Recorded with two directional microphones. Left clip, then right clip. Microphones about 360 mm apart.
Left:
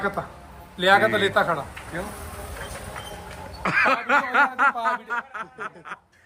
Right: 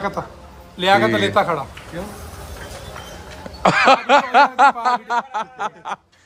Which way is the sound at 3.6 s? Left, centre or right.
Centre.